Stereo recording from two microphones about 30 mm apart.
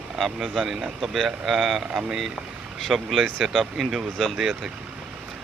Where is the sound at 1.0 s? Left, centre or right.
Centre.